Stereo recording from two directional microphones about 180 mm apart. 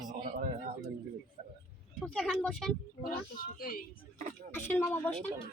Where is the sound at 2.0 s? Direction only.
Centre (ahead or behind).